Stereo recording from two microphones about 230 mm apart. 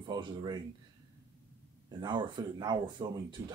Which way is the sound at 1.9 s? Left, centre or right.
Centre.